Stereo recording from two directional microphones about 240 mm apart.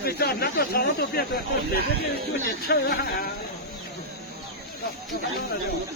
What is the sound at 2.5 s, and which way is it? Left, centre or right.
Speech, left.